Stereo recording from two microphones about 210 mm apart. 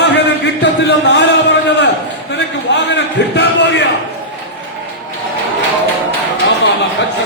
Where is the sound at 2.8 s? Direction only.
55° left (ahead or behind).